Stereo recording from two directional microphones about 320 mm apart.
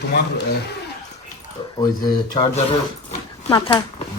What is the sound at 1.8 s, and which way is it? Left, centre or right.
Speech, centre.